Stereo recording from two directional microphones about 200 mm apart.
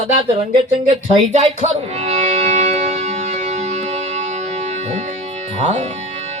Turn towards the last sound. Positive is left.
turn(degrees=-35)  # may be behind; listen again after turning